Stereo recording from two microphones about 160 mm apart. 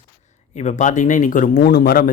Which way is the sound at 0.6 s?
50° left (ahead or behind).